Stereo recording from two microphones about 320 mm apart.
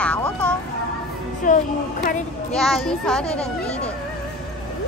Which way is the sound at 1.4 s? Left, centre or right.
Left.